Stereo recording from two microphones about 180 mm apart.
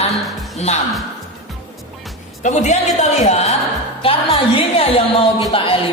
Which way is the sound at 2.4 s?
40° left (ahead or behind).